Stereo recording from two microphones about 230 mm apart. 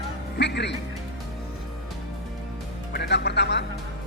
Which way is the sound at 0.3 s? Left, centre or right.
Left.